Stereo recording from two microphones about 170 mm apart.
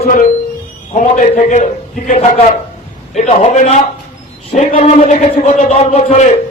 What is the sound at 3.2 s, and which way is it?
A man's voice, 40° left (ahead or behind).